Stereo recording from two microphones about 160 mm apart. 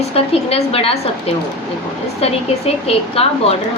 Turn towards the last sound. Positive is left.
turn(degrees=40)  # may be behind; listen again after turning